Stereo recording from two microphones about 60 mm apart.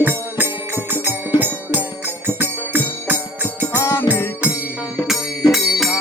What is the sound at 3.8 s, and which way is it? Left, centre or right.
Music, left.